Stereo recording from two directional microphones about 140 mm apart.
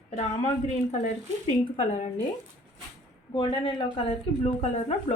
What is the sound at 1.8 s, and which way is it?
Speech, 60° left (ahead or behind).